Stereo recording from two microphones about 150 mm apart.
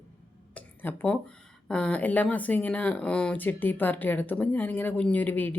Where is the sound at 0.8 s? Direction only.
10° left (ahead or behind).